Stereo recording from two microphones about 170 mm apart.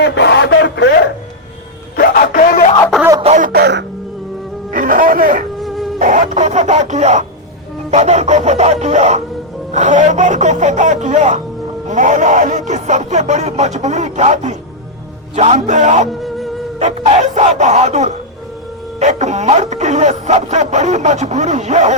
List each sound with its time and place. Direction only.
0.0 s speech: 90° left
2.0 s a sound: 60° left (ahead or behind)
3.3 s music: 60° right (ahead or behind); by 3.8 s 80° right
4.7 s music: 55° right (ahead or behind)
5.5 s music: centre (ahead or behind)
6.0 s speech: 50° right (ahead or behind)
7.9 s music: 40° right (ahead or behind)
9.7 s speech: 45° right (ahead or behind)